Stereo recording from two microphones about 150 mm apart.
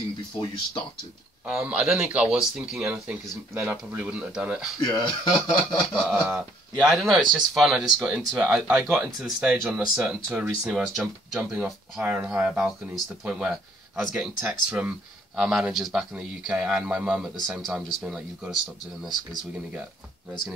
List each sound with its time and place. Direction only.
1.4 s speech: 5° right (ahead or behind)
4.8 s speech: 30° left (ahead or behind)
6.0 s speech: 5° right (ahead or behind)
8.6 s speech: 15° right (ahead or behind)